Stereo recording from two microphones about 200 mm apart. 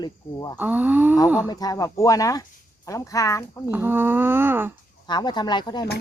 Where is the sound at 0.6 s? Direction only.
10° right (ahead or behind).